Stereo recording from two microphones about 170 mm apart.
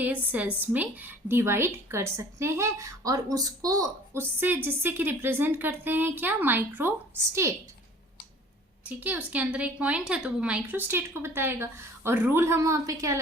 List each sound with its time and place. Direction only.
0.0 s a woman's voice: 10° right (ahead or behind)
8.9 s a woman's voice: 10° right (ahead or behind)